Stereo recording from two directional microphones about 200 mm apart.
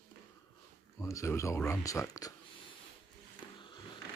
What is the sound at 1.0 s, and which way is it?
Speech, 15° left (ahead or behind).